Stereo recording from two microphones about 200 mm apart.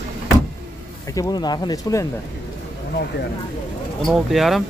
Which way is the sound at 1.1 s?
20° left (ahead or behind).